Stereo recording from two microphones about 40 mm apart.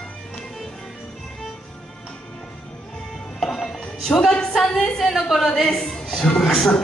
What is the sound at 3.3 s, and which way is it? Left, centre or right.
Music, centre.